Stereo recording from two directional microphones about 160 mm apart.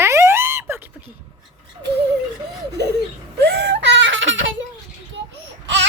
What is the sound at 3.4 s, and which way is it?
Whimper, 90° right.